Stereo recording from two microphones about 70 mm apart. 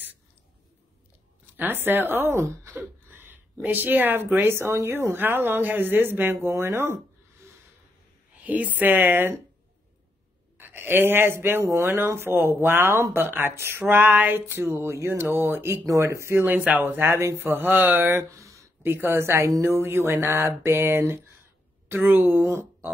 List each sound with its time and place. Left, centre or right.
1.6 s speech: right
3.1 s a woman's voice: right
8.5 s a woman's voice: right
10.6 s speech: right
14.4 s speech: right
16.5 s a woman's voice: right
18.3 s a sound: right
18.9 s speech: right